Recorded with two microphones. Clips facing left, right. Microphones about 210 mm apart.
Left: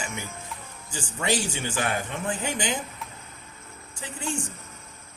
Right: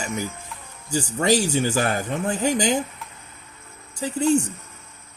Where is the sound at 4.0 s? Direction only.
40° right (ahead or behind).